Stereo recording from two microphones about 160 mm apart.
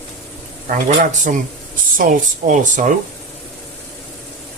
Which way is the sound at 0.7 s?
50° right (ahead or behind).